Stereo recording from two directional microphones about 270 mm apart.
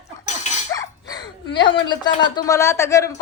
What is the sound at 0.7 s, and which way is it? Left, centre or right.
Dog, centre.